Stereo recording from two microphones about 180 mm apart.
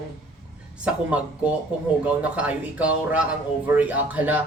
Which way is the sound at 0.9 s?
5° right (ahead or behind).